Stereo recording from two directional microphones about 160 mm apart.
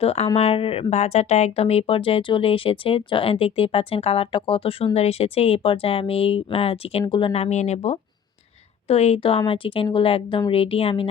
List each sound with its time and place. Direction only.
0.0 s speech: 40° left (ahead or behind)